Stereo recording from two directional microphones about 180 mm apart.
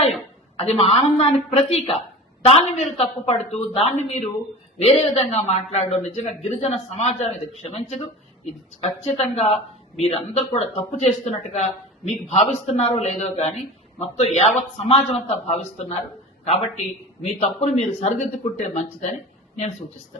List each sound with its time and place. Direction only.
0.5 s a man's voice: 35° left (ahead or behind)